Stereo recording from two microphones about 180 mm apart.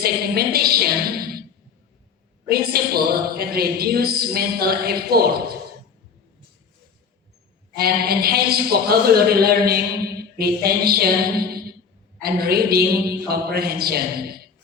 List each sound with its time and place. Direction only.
0.0 s a woman's voice: 60° right (ahead or behind)
2.5 s a man's voice: 60° right (ahead or behind)
7.8 s a man's voice: 60° right (ahead or behind)